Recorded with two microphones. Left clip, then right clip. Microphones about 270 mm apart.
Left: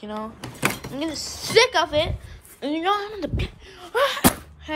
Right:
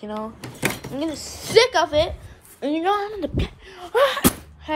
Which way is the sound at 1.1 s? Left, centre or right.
Left.